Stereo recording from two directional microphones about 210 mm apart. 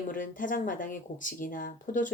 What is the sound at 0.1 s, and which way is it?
Speech, 40° left (ahead or behind).